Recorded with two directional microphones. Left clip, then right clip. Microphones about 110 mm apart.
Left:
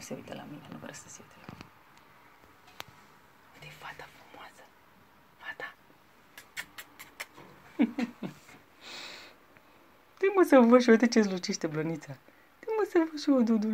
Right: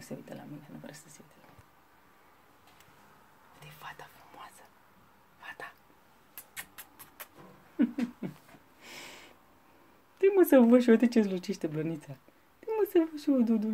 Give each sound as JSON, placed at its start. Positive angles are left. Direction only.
{"t": 0.0, "sound": "speech", "side_deg": -15}
{"t": 3.8, "sound": "whispering", "side_deg": -5}
{"t": 5.4, "sound": "a sound", "side_deg": -5}
{"t": 6.5, "sound": "mouse", "side_deg": 15}
{"t": 7.7, "sound": "a sound", "side_deg": -10}
{"t": 8.8, "sound": "sniff", "side_deg": -50}
{"t": 10.1, "sound": "speech", "side_deg": -30}